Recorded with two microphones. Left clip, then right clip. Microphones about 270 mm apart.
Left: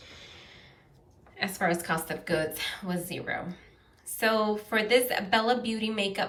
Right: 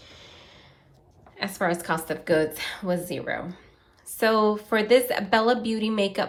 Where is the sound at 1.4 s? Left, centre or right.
Centre.